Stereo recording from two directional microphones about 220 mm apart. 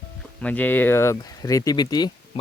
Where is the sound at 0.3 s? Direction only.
5° left (ahead or behind).